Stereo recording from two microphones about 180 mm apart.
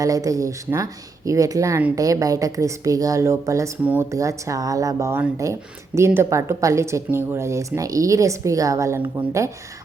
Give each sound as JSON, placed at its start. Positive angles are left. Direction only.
{"t": 0.0, "sound": "speech", "side_deg": -20}